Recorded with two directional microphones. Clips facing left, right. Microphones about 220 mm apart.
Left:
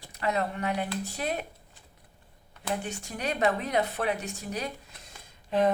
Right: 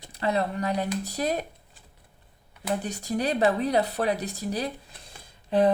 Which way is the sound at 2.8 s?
35° right (ahead or behind).